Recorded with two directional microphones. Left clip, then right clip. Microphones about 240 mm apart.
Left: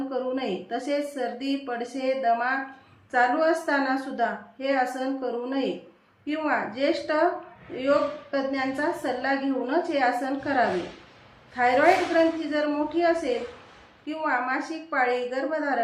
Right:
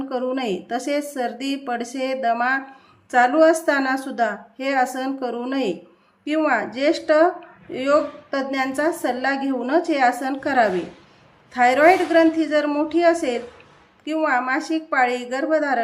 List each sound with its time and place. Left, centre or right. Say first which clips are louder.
0.1 s a woman's voice: right 6 dB; right